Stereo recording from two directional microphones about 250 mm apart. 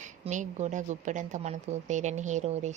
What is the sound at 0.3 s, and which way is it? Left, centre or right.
A woman's voice, right.